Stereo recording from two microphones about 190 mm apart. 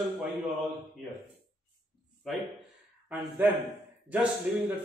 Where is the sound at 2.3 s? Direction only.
Centre (ahead or behind).